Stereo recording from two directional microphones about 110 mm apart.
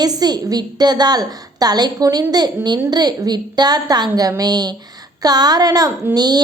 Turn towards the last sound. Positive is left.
turn(degrees=-40)  # may be behind; listen again after turning